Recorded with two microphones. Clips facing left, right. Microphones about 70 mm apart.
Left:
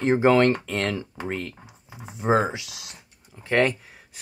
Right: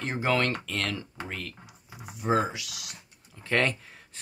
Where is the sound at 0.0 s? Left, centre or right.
Left.